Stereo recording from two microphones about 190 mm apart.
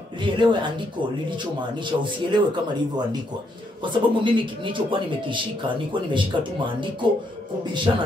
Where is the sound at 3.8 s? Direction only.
25° right (ahead or behind).